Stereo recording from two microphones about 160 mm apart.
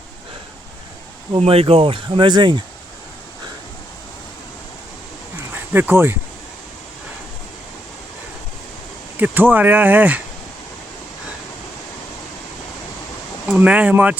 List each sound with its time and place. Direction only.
1.4 s speech: 40° right (ahead or behind)
5.5 s speech: 10° right (ahead or behind)
9.1 s speech: 10° right (ahead or behind)
13.5 s speech: 5° right (ahead or behind)